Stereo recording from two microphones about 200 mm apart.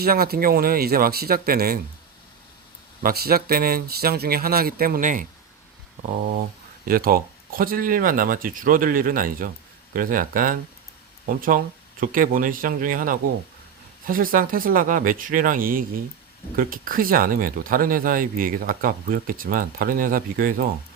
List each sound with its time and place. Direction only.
0.0 s speech: 50° right (ahead or behind)
3.0 s speech: 50° right (ahead or behind)
6.8 s speech: 45° right (ahead or behind)